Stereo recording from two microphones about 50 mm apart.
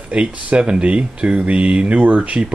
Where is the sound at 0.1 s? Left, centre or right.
Right.